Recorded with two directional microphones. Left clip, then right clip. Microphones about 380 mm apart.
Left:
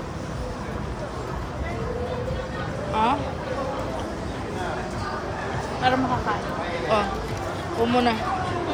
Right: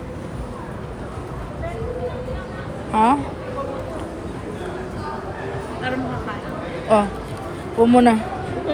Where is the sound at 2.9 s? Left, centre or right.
Centre.